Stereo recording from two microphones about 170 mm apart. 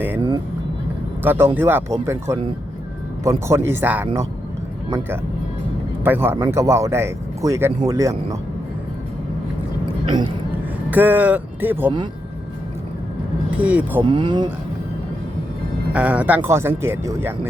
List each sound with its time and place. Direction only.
1.2 s speech: 10° right (ahead or behind)
10.9 s speech: 10° right (ahead or behind)
13.6 s speech: 10° right (ahead or behind)
14.0 s speech: 30° right (ahead or behind)
15.9 s speech: 5° right (ahead or behind)